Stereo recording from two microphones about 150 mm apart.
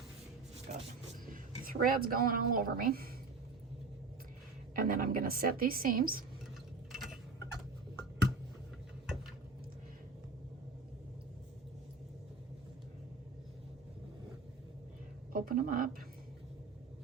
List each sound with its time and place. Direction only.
0.7 s speech: 50° right (ahead or behind)
1.3 s a woman's voice: 70° right (ahead or behind)
4.7 s a woman's voice: 70° right (ahead or behind)
6.9 s tick-tock: 5° right (ahead or behind)
15.3 s speech: 70° right (ahead or behind)